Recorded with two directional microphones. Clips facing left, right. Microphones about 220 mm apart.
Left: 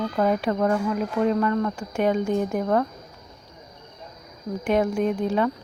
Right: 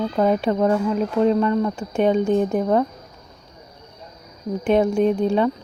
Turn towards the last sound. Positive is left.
turn(degrees=-25)  # may be behind; listen again after turning